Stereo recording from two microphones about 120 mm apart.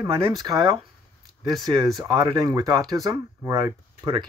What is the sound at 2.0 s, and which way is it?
Speech, 35° right (ahead or behind).